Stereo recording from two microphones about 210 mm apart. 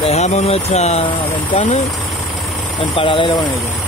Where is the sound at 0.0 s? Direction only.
30° left (ahead or behind).